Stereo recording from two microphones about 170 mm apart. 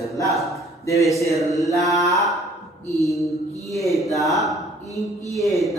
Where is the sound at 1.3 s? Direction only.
Centre (ahead or behind).